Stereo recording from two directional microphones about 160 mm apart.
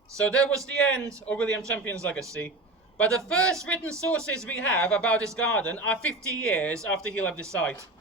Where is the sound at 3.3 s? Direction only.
5° left (ahead or behind).